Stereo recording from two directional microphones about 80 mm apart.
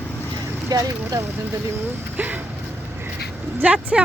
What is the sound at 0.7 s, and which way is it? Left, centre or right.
Vehicle, right.